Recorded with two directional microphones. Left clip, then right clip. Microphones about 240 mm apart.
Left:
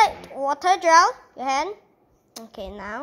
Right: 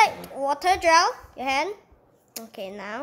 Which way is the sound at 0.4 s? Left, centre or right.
Centre.